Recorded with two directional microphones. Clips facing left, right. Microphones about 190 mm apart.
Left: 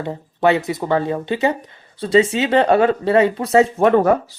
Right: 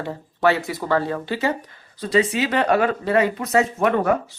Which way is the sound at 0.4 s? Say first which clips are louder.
Left 3 dB; 20° left (ahead or behind).